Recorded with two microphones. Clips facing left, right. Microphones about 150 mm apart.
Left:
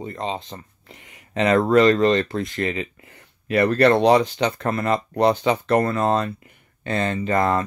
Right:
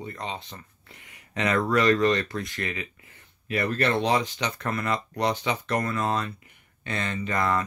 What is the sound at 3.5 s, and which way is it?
Speech, 75° left (ahead or behind).